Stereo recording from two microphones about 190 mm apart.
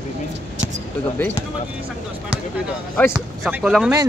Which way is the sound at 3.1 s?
5° right (ahead or behind).